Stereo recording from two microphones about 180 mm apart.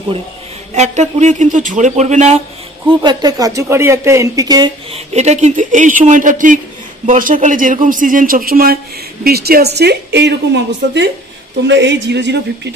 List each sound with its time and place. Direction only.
0.7 s speech: 40° right (ahead or behind)
3.0 s speech: 25° right (ahead or behind)
4.9 s a woman's voice: 40° right (ahead or behind); by 12.4 s 75° right (ahead or behind)